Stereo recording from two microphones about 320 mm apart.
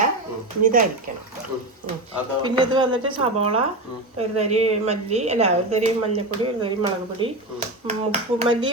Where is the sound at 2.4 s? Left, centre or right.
Centre.